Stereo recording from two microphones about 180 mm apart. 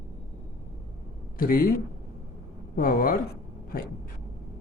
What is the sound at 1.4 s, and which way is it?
Speech, 55° left (ahead or behind).